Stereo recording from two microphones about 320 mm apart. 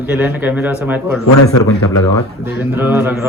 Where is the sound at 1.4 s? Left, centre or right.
Left.